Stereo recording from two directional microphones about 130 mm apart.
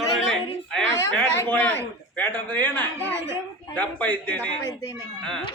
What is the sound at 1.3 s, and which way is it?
A man's voice, 15° left (ahead or behind).